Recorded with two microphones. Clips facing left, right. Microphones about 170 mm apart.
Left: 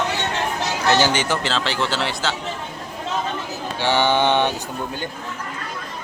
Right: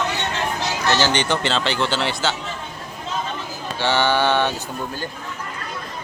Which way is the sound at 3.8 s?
15° left (ahead or behind).